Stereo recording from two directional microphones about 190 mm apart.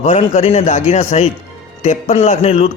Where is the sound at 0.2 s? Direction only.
35° left (ahead or behind).